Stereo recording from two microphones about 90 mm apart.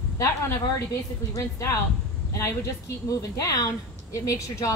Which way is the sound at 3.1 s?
40° left (ahead or behind).